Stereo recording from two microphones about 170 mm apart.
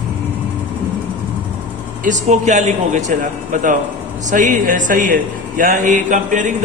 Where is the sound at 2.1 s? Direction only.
45° right (ahead or behind).